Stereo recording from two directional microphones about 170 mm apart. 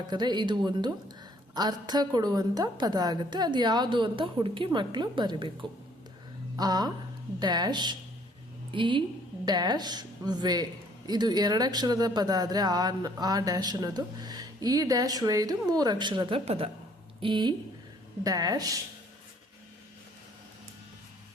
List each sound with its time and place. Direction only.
0.1 s a woman's voice: 25° right (ahead or behind)
6.6 s a woman's voice: 25° right (ahead or behind)